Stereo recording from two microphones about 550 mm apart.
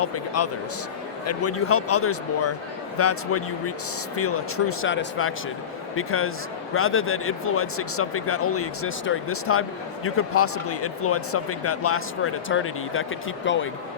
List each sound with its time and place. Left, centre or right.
0.0 s speech: left